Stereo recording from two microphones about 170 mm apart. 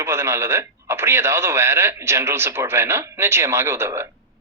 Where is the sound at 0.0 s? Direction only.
15° right (ahead or behind).